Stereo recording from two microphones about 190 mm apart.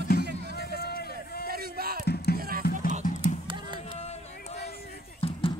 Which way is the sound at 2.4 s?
50° right (ahead or behind).